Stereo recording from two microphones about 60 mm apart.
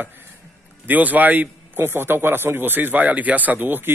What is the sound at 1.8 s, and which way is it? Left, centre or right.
A man's voice, right.